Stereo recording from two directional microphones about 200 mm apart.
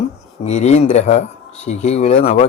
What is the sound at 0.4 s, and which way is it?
Speech, 35° left (ahead or behind).